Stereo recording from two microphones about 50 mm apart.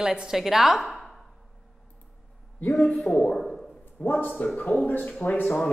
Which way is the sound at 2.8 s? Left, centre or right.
Centre.